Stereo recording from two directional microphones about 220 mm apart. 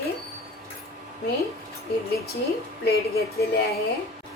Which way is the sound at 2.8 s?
45° left (ahead or behind).